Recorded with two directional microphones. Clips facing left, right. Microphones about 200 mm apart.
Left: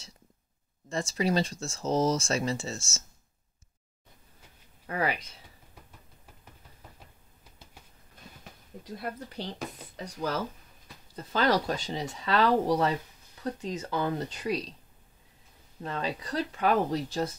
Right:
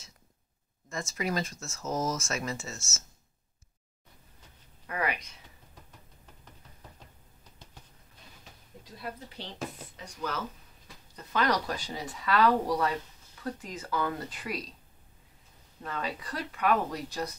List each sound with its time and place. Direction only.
0.8 s speech: 30° left (ahead or behind)
4.8 s speech: 30° left (ahead or behind)
8.9 s speech: 55° left (ahead or behind)
9.9 s speech: 35° left (ahead or behind)
15.8 s speech: 25° left (ahead or behind)